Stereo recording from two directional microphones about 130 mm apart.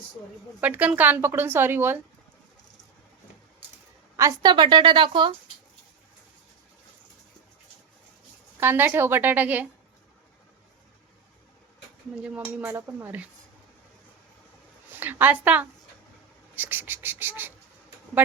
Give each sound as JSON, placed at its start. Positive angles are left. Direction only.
{"t": 0.6, "sound": "speech", "side_deg": -10}
{"t": 4.2, "sound": "a woman's voice", "side_deg": -25}
{"t": 4.5, "sound": "speech", "side_deg": -35}
{"t": 8.6, "sound": "speech", "side_deg": -15}
{"t": 12.2, "sound": "speech", "side_deg": -10}
{"t": 14.8, "sound": "a woman's voice", "side_deg": -15}